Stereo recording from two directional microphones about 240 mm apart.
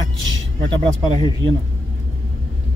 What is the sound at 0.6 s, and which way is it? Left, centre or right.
Speech, centre.